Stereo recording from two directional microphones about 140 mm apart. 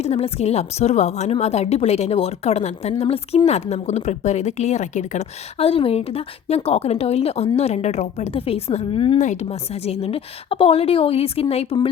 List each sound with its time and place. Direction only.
0.0 s a woman's voice: 50° left (ahead or behind)
9.2 s a woman's voice: 55° left (ahead or behind)